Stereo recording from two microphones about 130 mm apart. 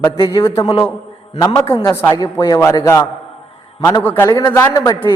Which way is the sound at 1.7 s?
20° left (ahead or behind).